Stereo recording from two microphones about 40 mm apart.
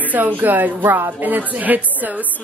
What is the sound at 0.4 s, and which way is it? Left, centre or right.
A woman's voice, right.